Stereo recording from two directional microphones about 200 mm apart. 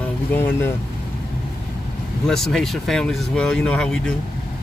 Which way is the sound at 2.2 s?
Centre (ahead or behind).